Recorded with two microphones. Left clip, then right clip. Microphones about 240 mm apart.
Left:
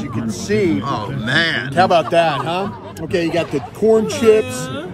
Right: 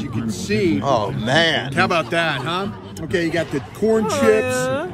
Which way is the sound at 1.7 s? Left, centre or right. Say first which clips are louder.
Left 5 dB; left.